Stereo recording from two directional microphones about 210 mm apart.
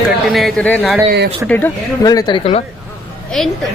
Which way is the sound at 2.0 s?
15° left (ahead or behind).